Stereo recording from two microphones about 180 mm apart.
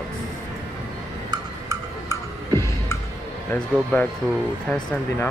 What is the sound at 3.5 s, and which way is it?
Speech, 10° left (ahead or behind).